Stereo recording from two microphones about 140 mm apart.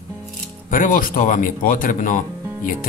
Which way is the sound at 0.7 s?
80° left.